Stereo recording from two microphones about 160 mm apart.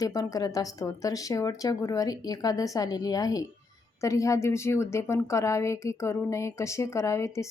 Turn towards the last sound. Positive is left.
turn(degrees=20)  # may be behind; listen again after turning